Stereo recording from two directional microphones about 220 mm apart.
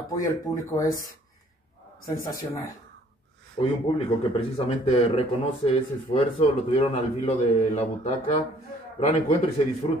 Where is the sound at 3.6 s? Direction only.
25° left (ahead or behind).